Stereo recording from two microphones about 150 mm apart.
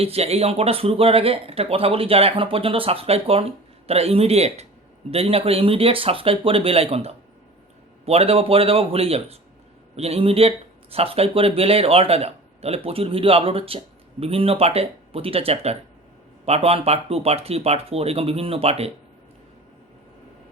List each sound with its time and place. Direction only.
0.0 s speech: 40° right (ahead or behind)